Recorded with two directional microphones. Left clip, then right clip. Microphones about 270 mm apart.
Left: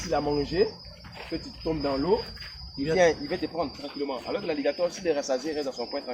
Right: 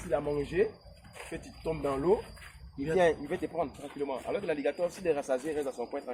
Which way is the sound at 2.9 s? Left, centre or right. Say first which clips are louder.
Left 4 dB; centre.